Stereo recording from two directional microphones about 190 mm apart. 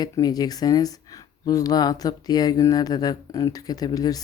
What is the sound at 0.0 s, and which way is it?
Speech, 20° left (ahead or behind).